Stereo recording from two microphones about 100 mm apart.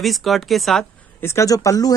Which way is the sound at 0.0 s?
Centre (ahead or behind).